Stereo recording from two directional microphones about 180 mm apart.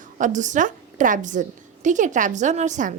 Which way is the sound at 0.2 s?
45° right (ahead or behind).